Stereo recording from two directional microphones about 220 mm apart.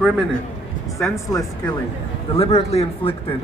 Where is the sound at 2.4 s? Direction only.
30° left (ahead or behind).